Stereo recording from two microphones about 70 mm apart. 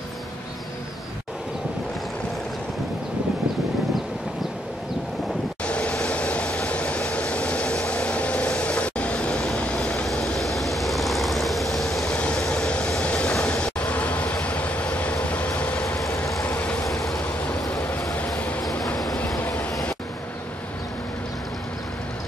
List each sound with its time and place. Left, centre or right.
5.6 s vehicle: centre
16.8 s vehicle: centre
18.6 s vehicle: centre
19.3 s vehicle: left